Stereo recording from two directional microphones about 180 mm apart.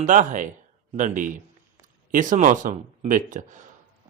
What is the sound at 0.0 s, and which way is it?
Speech, 45° right (ahead or behind).